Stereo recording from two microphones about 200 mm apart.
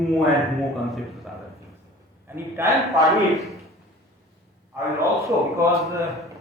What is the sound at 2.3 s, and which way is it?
Speech, 10° right (ahead or behind).